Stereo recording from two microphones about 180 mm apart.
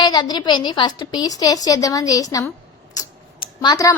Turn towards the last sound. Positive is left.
turn(degrees=20)  # may be behind; listen again after turning